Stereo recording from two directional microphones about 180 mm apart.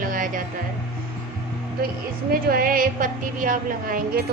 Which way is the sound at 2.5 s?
50° right (ahead or behind).